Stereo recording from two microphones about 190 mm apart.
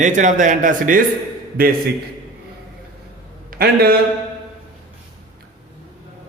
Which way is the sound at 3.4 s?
55° right (ahead or behind).